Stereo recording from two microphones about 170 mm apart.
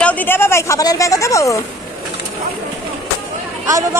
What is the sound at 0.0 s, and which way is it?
A woman's voice, 10° left (ahead or behind).